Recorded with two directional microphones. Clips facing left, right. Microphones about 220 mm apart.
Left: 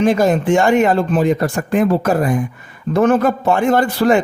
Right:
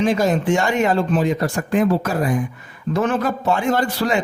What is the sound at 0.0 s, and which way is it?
Speech, 50° left (ahead or behind).